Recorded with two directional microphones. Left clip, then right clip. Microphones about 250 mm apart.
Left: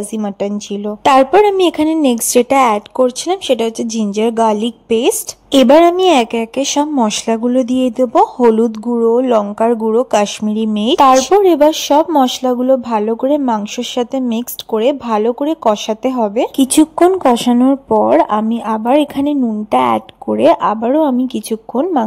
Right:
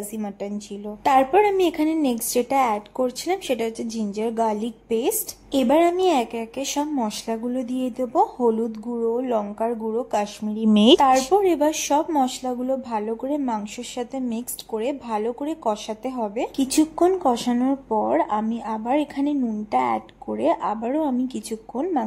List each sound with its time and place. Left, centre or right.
0.1 s speech: left
10.6 s speech: centre
11.0 s speech: left